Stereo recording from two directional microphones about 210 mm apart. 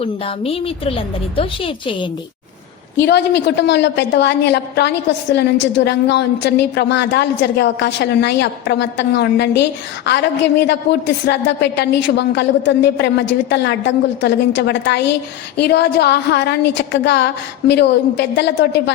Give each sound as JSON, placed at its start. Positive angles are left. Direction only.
{"t": 0.0, "sound": "a woman's voice", "side_deg": 25}
{"t": 3.0, "sound": "a woman's voice", "side_deg": 55}